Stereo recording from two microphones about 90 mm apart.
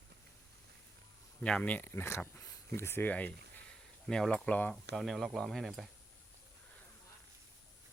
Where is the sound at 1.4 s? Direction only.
15° left (ahead or behind).